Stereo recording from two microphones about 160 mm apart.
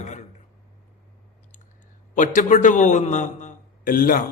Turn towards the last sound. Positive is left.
turn(degrees=60)  # may be behind; listen again after turning